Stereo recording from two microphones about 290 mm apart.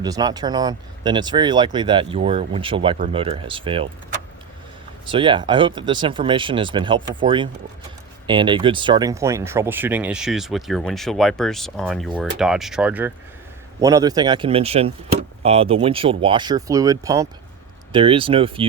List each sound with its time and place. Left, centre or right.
0.0 s speech: centre
5.0 s speech: centre